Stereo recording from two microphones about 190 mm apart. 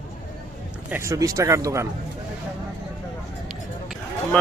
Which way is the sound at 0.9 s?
15° right (ahead or behind).